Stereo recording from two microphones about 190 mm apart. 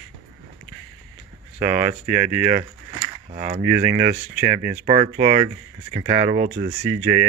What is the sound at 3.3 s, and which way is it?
Speech, 35° right (ahead or behind).